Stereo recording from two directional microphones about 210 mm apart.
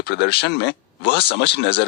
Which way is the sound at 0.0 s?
50° left (ahead or behind).